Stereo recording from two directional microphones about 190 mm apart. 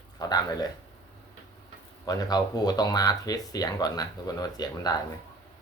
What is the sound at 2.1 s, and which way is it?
Speech, 20° left (ahead or behind).